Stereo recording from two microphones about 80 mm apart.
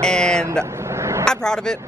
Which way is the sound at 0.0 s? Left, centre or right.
Centre.